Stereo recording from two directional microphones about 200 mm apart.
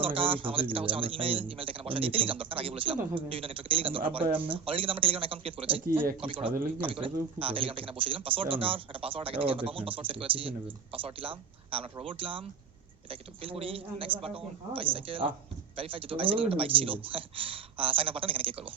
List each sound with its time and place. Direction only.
0.0 s speech: 25° right (ahead or behind)